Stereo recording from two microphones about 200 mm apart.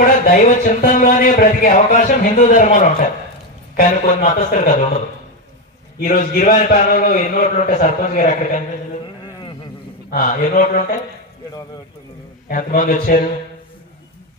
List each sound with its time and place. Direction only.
0.0 s speech: 45° left (ahead or behind)
6.0 s speech: 40° left (ahead or behind)
10.0 s speech: 45° left (ahead or behind)
12.4 s speech: 45° left (ahead or behind)